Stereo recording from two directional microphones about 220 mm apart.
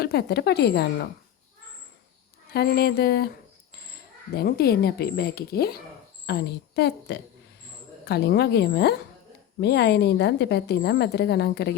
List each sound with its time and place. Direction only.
0.0 s a woman's voice: 45° left (ahead or behind)
2.5 s a woman's voice: 45° left (ahead or behind)
4.4 s a woman's voice: 45° left (ahead or behind)